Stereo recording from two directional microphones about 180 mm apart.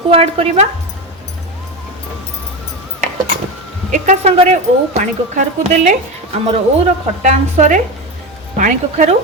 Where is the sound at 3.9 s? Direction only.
40° right (ahead or behind).